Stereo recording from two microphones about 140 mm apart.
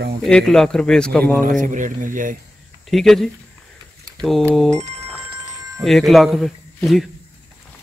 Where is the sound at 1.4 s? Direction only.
70° right (ahead or behind).